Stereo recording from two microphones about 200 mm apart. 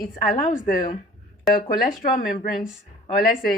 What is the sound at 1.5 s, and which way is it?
A woman's voice, 45° left (ahead or behind).